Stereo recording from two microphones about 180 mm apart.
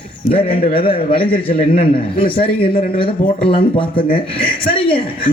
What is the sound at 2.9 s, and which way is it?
Speech, 30° left (ahead or behind).